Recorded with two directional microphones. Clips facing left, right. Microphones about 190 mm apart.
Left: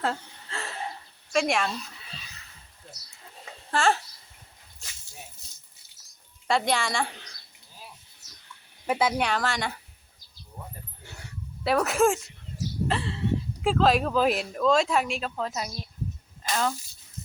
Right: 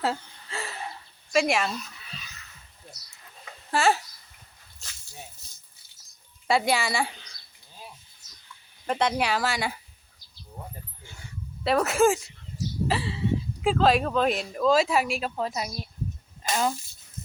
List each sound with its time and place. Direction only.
0.0 s a sound: 5° right (ahead or behind)
1.3 s speech: 5° right (ahead or behind)
2.0 s music: 30° left (ahead or behind)
3.7 s a child's voice: 5° right (ahead or behind)
6.5 s a woman's voice: 5° right (ahead or behind)
8.9 s speech: 5° left (ahead or behind)
11.6 s speech: centre (ahead or behind)